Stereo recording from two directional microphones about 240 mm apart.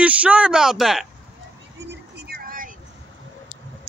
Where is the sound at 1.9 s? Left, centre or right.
Right.